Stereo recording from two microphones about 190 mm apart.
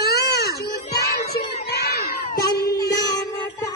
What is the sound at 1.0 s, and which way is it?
Child singing, 55° left (ahead or behind).